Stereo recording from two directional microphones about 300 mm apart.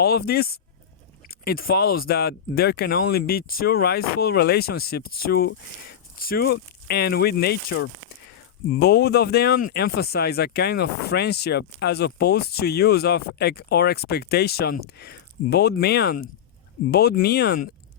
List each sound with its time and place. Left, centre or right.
0.0 s speech: left